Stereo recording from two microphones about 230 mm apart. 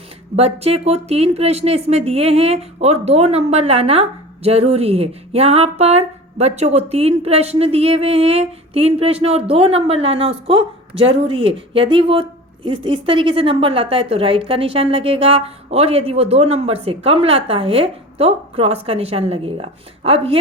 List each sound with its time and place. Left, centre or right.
0.3 s a woman's voice: right
10.5 s a woman's voice: right
11.1 s a woman's voice: right